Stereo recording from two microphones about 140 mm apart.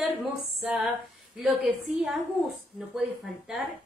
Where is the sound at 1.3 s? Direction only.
Centre (ahead or behind).